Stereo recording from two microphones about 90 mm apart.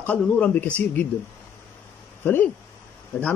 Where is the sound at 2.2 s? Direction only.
25° left (ahead or behind).